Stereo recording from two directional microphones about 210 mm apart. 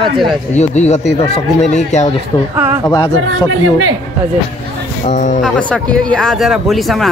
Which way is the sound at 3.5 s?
70° right (ahead or behind).